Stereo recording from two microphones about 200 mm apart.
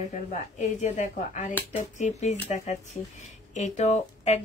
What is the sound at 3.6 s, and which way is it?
Speech, 35° left (ahead or behind).